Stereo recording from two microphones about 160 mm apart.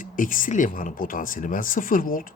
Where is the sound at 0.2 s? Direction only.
55° left (ahead or behind).